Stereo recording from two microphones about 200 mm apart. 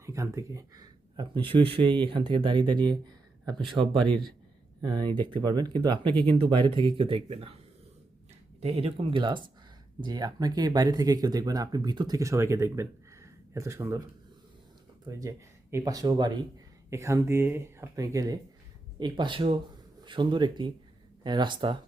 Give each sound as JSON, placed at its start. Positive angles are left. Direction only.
{"t": 0.0, "sound": "speech", "side_deg": -15}
{"t": 8.6, "sound": "speech", "side_deg": -30}